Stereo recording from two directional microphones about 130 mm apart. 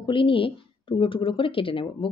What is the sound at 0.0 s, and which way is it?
A woman's voice, 40° left (ahead or behind).